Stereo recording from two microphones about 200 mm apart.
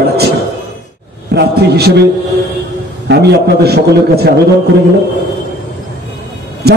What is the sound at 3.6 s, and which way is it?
Speech, 50° right (ahead or behind).